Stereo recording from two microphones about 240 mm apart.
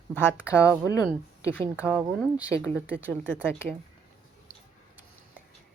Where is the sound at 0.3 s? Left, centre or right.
Centre.